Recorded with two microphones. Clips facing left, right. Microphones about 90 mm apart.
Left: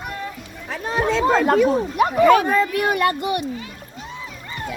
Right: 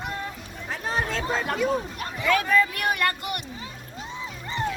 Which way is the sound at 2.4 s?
25° left (ahead or behind).